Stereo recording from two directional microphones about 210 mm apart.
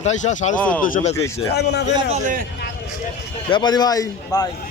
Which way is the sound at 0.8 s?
40° left (ahead or behind).